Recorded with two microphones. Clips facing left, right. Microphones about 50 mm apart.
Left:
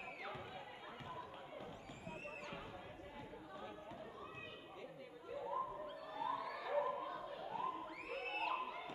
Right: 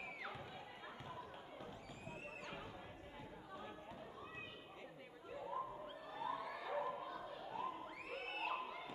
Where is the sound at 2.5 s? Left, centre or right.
Centre.